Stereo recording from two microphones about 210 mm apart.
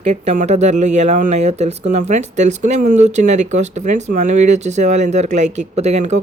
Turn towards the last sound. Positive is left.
turn(degrees=-35)  # may be behind; listen again after turning